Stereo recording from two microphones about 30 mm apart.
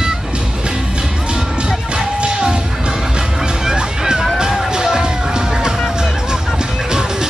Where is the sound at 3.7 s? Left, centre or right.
Right.